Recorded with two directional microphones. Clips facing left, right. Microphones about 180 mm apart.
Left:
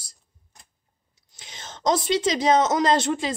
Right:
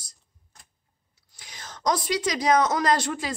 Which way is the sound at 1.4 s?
25° left (ahead or behind).